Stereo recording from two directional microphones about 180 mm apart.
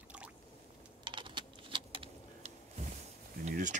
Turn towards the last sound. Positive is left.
turn(degrees=-45)  # may be behind; listen again after turning